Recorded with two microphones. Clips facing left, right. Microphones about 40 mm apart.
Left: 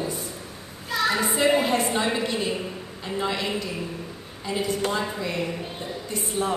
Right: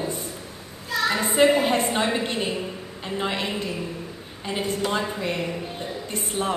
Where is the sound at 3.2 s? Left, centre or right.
Right.